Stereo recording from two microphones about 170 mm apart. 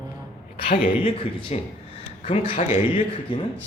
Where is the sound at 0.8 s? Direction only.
35° left (ahead or behind).